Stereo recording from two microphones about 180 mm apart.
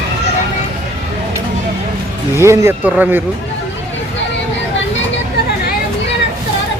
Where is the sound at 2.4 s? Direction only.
15° right (ahead or behind).